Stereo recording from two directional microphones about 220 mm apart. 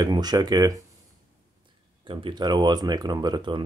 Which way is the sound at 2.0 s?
20° right (ahead or behind).